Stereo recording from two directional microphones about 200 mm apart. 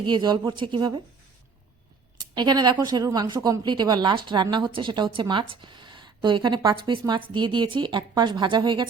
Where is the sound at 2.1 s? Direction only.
20° right (ahead or behind).